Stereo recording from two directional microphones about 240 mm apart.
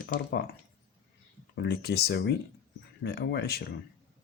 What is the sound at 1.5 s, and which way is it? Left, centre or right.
Speech, left.